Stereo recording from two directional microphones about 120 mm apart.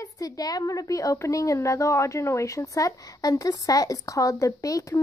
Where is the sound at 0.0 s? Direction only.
30° left (ahead or behind).